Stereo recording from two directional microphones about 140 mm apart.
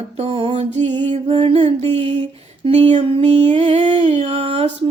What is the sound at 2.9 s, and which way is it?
Music, 50° right (ahead or behind).